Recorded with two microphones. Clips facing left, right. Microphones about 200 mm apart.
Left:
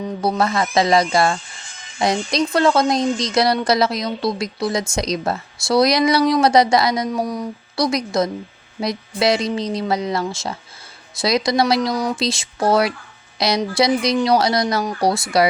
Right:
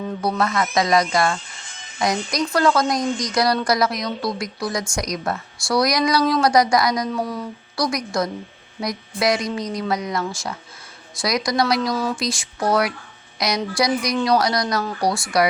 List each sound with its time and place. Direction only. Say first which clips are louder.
0.2 s a woman's voice: left 3 dB; 25° left (ahead or behind)
7.1 s a woman's voice: left 3 dB; 15° left (ahead or behind)